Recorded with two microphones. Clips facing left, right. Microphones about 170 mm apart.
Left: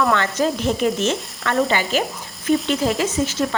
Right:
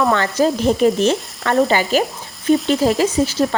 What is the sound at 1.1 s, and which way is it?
Stir, 40° right (ahead or behind).